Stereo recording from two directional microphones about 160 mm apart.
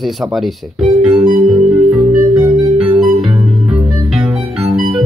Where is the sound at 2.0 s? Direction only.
25° right (ahead or behind).